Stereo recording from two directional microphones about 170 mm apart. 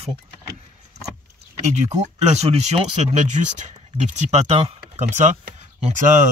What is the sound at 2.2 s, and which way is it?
Speech, 40° right (ahead or behind).